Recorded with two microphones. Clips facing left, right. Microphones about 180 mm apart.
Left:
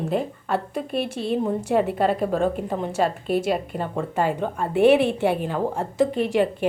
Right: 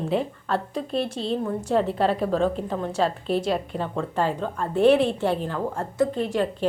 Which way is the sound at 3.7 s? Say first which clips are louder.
Left 1 dB; 10° left (ahead or behind).